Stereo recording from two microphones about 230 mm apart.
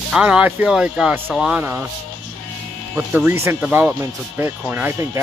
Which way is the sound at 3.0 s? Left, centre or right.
Centre.